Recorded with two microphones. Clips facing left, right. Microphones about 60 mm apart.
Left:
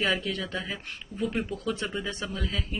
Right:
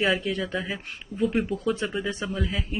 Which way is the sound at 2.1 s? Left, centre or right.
Centre.